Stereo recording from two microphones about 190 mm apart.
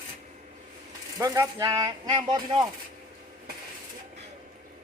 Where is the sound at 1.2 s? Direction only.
20° right (ahead or behind).